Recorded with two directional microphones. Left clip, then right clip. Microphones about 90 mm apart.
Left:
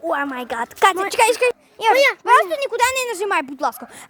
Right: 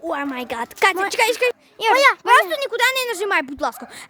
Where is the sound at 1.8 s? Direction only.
5° right (ahead or behind).